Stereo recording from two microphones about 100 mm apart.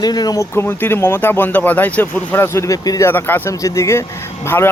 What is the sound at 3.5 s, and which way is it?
Speech, 30° left (ahead or behind).